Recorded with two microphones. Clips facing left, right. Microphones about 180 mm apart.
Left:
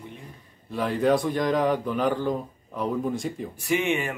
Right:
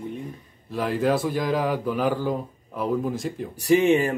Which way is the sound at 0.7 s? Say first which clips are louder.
Even; centre (ahead or behind).